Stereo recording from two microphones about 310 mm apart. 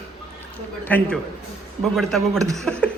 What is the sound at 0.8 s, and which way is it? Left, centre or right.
A man's voice, centre.